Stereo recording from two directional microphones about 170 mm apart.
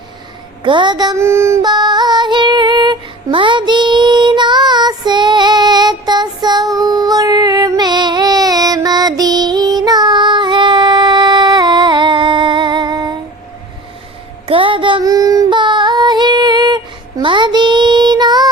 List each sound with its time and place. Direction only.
0.6 s female singing: 30° right (ahead or behind)
14.4 s female singing: 30° right (ahead or behind)